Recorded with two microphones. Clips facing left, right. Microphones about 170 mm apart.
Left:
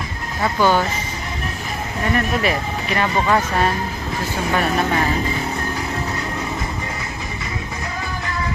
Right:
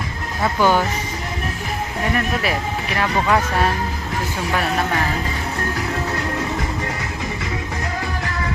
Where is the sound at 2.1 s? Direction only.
5° right (ahead or behind).